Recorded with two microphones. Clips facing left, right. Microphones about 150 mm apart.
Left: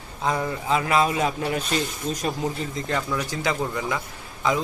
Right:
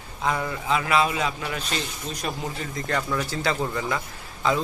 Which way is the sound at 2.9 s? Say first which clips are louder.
Right 1 dB; 10° left (ahead or behind).